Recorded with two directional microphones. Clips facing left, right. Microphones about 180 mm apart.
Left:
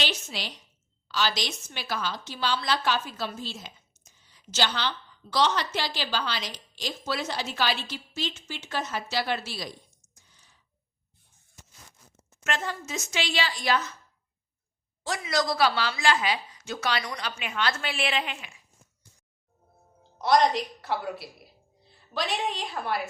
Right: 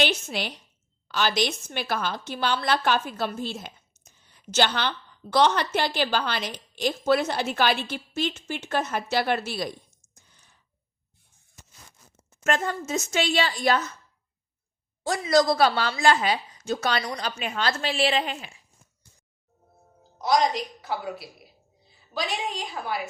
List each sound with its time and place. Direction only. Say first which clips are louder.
0.0 s a woman's voice: right 7 dB; 55° right (ahead or behind)
12.4 s speech: right 5 dB; 45° right (ahead or behind)
15.2 s a woman's voice: right 5 dB; 40° right (ahead or behind)
20.1 s a woman's voice: left 1 dB; centre (ahead or behind)